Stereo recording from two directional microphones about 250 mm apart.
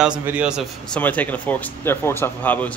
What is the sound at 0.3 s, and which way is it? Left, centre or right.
Speech, centre.